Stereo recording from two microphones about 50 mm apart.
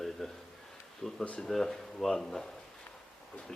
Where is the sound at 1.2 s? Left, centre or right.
Left.